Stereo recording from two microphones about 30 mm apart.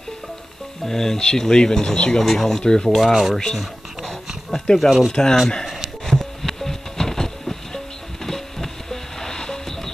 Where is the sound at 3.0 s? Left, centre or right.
Centre.